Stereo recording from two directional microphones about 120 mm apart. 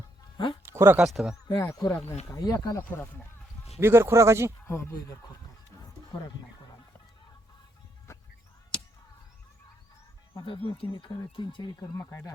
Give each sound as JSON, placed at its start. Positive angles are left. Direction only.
{"t": 0.6, "sound": "a sound", "side_deg": -20}
{"t": 0.9, "sound": "speech", "side_deg": -5}
{"t": 1.5, "sound": "speech", "side_deg": 30}
{"t": 2.9, "sound": "speech", "side_deg": 15}
{"t": 3.8, "sound": "speech", "side_deg": -20}
{"t": 4.6, "sound": "speech", "side_deg": 20}
{"t": 10.3, "sound": "speech", "side_deg": 40}
{"t": 11.8, "sound": "speech", "side_deg": 25}